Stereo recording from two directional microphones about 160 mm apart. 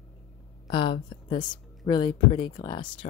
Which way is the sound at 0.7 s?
35° left (ahead or behind).